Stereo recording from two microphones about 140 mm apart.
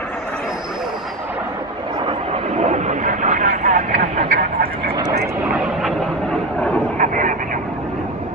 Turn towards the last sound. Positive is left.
turn(degrees=-70)  # may be behind; listen again after turning